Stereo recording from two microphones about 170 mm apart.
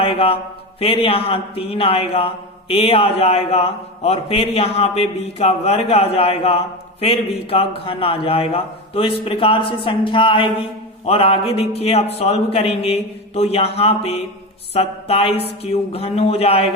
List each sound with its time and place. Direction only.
0.0 s a man's voice: 35° left (ahead or behind)